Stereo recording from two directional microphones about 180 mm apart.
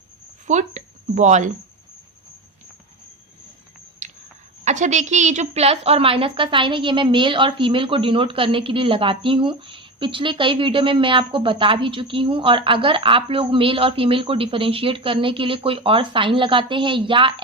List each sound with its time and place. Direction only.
0.4 s speech: 40° right (ahead or behind)
4.0 s a sound: 45° right (ahead or behind)
4.6 s a woman's voice: 40° right (ahead or behind)